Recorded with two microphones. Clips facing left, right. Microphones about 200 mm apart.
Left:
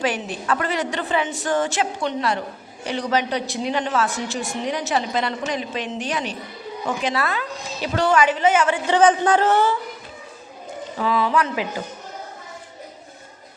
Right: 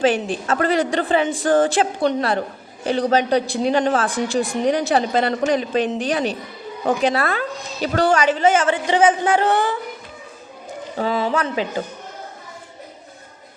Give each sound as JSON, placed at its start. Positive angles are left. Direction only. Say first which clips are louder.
{"t": 0.0, "sound": "a man's voice", "louder": "right 6 dB", "side_deg": -30}
{"t": 4.1, "sound": "a man's voice", "louder": "right 6 dB", "side_deg": -35}
{"t": 7.1, "sound": "speech", "louder": "right 3 dB", "side_deg": -50}
{"t": 8.0, "sound": "a man's voice", "louder": "right 1 dB", "side_deg": -30}
{"t": 8.9, "sound": "speech", "louder": "even", "side_deg": -10}
{"t": 10.9, "sound": "speech", "louder": "even", "side_deg": -30}